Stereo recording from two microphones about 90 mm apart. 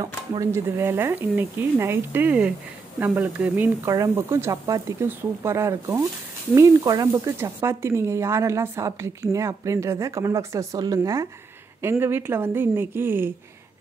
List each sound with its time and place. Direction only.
0.0 s speech: 40° right (ahead or behind)
0.7 s speech: 25° right (ahead or behind)
3.8 s speech: 35° right (ahead or behind)
5.0 s speech: 30° right (ahead or behind)
11.8 s speech: 25° right (ahead or behind)